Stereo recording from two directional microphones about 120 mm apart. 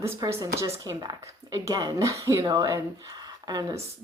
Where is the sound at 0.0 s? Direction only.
25° right (ahead or behind).